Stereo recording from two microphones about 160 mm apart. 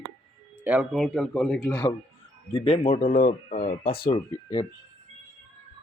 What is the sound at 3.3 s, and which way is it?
Speech, 50° left (ahead or behind).